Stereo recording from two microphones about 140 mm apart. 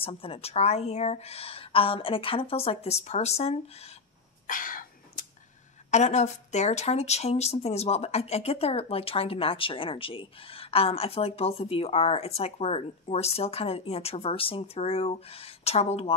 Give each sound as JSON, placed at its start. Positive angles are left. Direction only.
{"t": 0.0, "sound": "speech", "side_deg": 45}
{"t": 4.5, "sound": "a sound", "side_deg": 75}
{"t": 5.9, "sound": "speech", "side_deg": 55}